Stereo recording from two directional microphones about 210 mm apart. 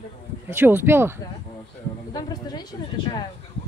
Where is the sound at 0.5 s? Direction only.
10° right (ahead or behind).